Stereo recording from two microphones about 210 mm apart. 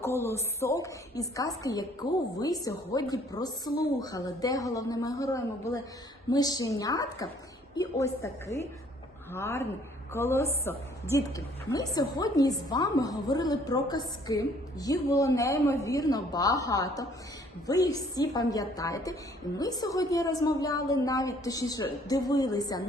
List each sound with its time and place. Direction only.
0.2 s a woman's voice: 10° left (ahead or behind)